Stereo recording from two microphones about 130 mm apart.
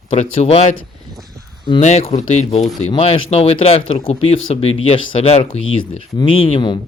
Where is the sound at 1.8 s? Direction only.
55° left (ahead or behind); by 6.7 s 40° left (ahead or behind).